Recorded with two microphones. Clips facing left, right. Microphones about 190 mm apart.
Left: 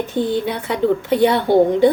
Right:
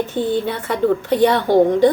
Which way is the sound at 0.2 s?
15° left (ahead or behind).